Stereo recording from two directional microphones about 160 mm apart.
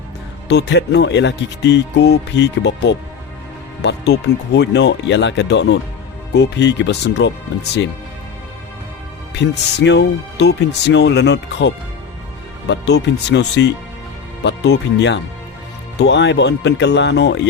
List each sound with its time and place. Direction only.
0.4 s speech: 90° left
9.3 s speech: 90° left